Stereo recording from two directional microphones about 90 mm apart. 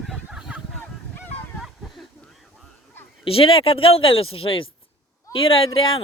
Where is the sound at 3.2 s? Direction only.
90° left.